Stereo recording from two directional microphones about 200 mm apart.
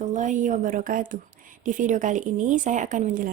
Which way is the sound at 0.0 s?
40° right (ahead or behind).